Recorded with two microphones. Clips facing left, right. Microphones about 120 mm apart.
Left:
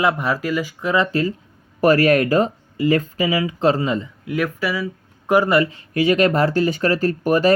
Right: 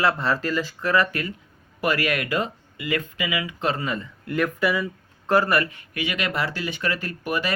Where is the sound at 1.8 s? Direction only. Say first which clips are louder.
Left 10 dB; 40° left (ahead or behind); by 4.0 s 25° left (ahead or behind).